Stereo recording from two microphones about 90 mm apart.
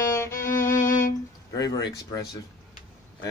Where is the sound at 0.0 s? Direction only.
35° left (ahead or behind).